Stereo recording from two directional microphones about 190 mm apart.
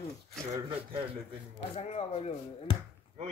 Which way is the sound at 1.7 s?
35° left (ahead or behind).